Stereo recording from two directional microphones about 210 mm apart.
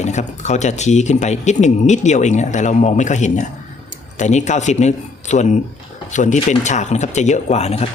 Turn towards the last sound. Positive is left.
turn(degrees=30)  # may be behind; listen again after turning